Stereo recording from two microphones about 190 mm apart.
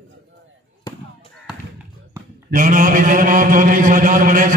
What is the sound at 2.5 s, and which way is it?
A man's voice, 45° right (ahead or behind).